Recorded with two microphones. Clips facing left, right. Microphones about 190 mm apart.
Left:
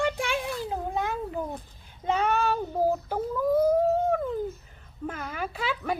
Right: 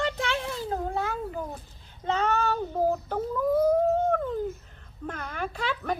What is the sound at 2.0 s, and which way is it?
Child singing, 10° left (ahead or behind).